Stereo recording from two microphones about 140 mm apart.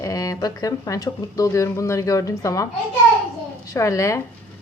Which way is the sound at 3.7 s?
20° left (ahead or behind).